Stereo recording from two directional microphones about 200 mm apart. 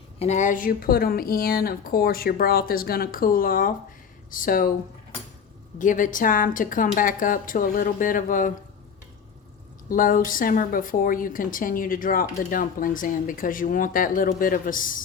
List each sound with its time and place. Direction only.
0.2 s a woman's voice: 35° left (ahead or behind)
5.8 s a woman's voice: 40° left (ahead or behind)
9.9 s a woman's voice: 45° left (ahead or behind)